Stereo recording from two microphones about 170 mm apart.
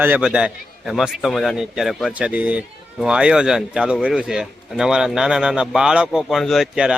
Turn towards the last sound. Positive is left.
turn(degrees=0)  # may be behind; listen again after turning